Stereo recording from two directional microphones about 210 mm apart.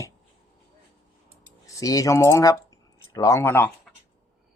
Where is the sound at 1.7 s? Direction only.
15° left (ahead or behind).